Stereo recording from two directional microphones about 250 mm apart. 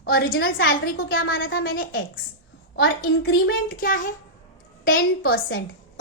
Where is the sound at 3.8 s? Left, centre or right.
Left.